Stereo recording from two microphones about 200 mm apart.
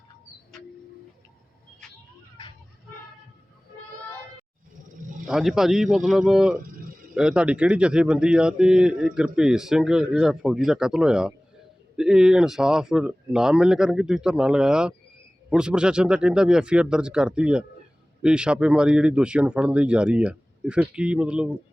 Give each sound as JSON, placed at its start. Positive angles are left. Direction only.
{"t": 2.4, "sound": "vehicle", "side_deg": 25}
{"t": 5.2, "sound": "speech", "side_deg": 0}